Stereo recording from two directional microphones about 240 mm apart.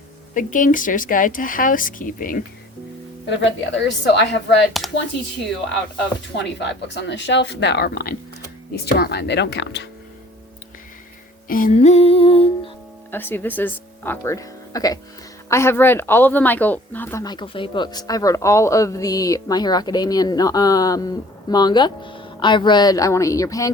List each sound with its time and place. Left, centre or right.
0.3 s speech: left
3.2 s speech: left
4.7 s speech: centre
6.3 s speech: left
11.4 s music: left
13.1 s speech: centre